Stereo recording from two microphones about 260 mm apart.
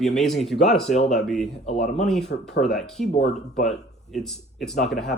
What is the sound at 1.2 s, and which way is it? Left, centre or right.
Speech, centre.